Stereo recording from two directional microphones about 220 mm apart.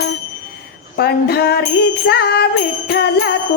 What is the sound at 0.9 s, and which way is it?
Music, 50° left (ahead or behind).